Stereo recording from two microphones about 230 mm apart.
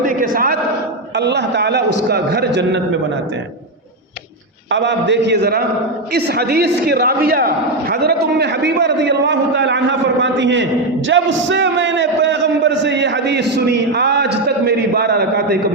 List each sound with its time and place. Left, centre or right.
0.0 s a sound: right
1.1 s a man's voice: right
4.7 s a man's voice: right